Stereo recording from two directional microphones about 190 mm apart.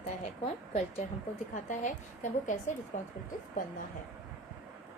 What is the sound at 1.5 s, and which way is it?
A woman's voice, 40° left (ahead or behind).